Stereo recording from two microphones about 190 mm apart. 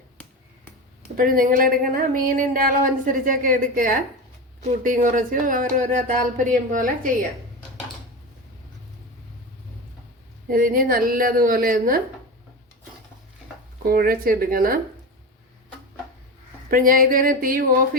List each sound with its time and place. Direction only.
1.1 s speech: 45° right (ahead or behind)
10.5 s speech: 50° right (ahead or behind)
13.8 s speech: 50° right (ahead or behind)
16.6 s speech: 50° right (ahead or behind)